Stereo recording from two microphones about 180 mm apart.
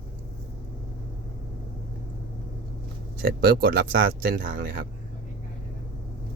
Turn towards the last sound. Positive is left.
turn(degrees=-55)  # may be behind; listen again after turning